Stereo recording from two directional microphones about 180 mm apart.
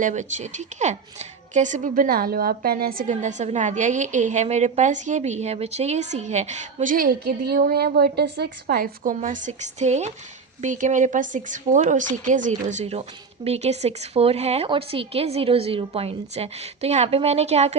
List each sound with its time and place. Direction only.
0.0 s a woman's voice: 40° right (ahead or behind)